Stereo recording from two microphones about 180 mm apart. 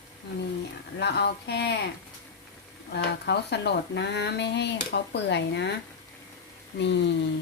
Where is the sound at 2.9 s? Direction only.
70° left (ahead or behind).